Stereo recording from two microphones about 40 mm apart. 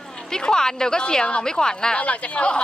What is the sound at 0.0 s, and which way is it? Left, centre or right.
Speech, centre.